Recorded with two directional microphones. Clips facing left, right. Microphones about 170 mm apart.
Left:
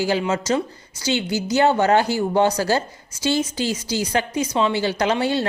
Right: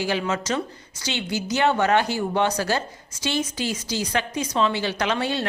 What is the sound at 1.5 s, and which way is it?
A woman's voice, 35° left (ahead or behind).